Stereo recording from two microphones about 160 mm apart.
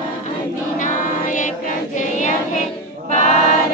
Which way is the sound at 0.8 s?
55° left (ahead or behind).